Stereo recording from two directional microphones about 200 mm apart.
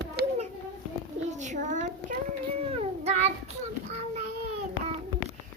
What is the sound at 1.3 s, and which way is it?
Child singing, 35° right (ahead or behind).